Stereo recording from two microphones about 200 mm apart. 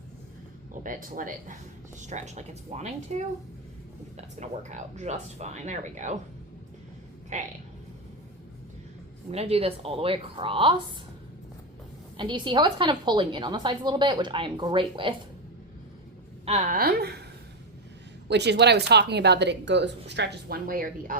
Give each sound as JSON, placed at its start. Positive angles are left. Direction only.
{"t": 0.7, "sound": "speech", "side_deg": -40}
{"t": 7.3, "sound": "speech", "side_deg": -35}
{"t": 9.3, "sound": "a woman's voice", "side_deg": -30}
{"t": 12.1, "sound": "a woman's voice", "side_deg": -25}
{"t": 16.5, "sound": "a woman's voice", "side_deg": -45}
{"t": 18.3, "sound": "speech", "side_deg": -60}